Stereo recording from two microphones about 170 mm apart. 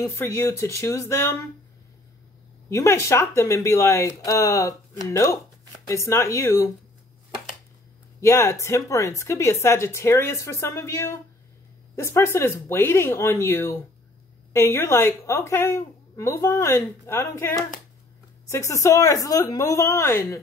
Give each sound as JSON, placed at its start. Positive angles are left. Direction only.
{"t": 0.0, "sound": "a woman's voice", "side_deg": 15}
{"t": 2.7, "sound": "a woman's voice", "side_deg": 15}
{"t": 8.2, "sound": "a woman's voice", "side_deg": 15}